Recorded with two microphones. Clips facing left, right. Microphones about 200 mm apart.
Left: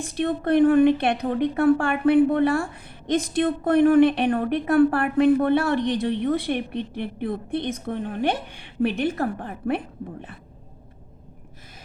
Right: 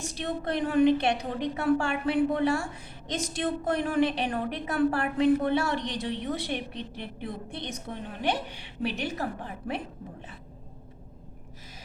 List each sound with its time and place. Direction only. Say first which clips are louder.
0.0 s a woman's voice: left 7 dB; 55° left (ahead or behind)